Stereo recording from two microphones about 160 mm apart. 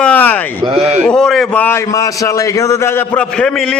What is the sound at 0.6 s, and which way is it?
Speech, 40° right (ahead or behind).